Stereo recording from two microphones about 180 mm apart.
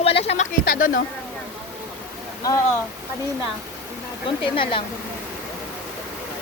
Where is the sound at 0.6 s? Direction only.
50° left (ahead or behind).